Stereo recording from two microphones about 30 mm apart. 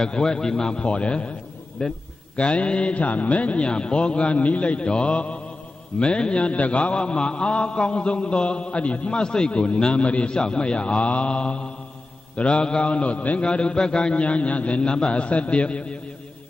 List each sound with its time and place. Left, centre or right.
0.0 s speech: left
0.7 s a man's voice: left
1.8 s speech: left
2.3 s a man's voice: left
9.2 s speech: left
9.5 s a man's voice: left
10.3 s a man's voice: left
11.0 s a man's voice: left
11.2 s a man's voice: left
13.4 s a man's voice: left
14.8 s a man's voice: left